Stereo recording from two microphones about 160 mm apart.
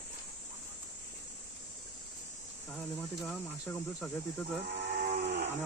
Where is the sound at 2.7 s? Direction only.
5° left (ahead or behind).